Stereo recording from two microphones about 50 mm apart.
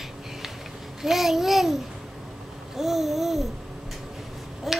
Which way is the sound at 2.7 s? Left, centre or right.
Centre.